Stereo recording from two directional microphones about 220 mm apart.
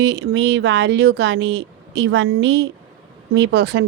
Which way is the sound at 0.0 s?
55° right (ahead or behind).